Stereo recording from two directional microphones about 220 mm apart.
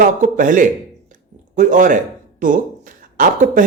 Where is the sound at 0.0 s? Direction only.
35° right (ahead or behind).